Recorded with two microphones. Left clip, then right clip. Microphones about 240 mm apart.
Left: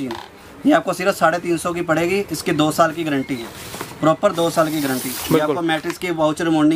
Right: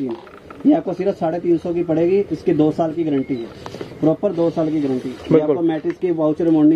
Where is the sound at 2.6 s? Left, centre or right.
Left.